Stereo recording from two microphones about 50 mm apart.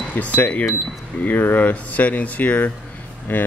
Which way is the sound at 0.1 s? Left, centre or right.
Left.